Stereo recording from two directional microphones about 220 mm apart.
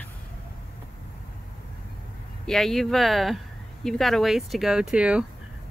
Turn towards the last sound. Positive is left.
turn(degrees=-5)  # may be behind; listen again after turning